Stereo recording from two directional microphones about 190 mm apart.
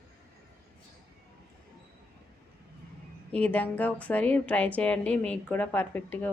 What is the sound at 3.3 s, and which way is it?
A woman's voice, 5° left (ahead or behind).